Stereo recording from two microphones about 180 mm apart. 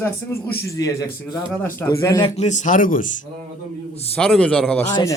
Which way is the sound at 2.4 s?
40° left (ahead or behind).